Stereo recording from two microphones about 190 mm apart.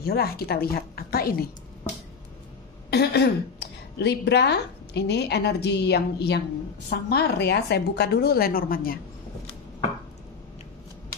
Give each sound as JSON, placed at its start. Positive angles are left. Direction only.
{"t": 0.0, "sound": "a woman's voice", "side_deg": 55}
{"t": 2.9, "sound": "a woman's voice", "side_deg": 60}